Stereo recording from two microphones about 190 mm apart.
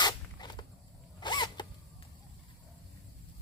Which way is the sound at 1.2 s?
20° left (ahead or behind).